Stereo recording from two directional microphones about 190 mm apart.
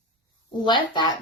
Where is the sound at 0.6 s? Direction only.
25° left (ahead or behind).